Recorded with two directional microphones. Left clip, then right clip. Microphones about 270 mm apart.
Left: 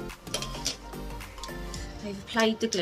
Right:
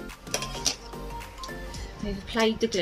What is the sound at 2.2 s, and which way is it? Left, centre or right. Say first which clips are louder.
Speech: right 1 dB; centre.